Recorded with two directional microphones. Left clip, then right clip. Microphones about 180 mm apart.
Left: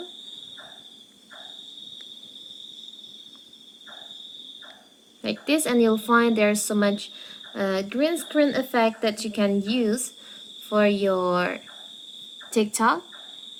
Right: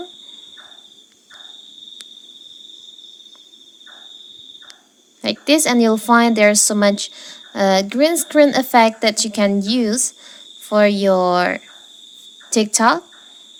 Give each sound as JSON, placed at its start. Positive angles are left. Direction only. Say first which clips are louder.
{"t": 5.2, "sound": "a woman's voice", "louder": "right 9 dB", "side_deg": -40}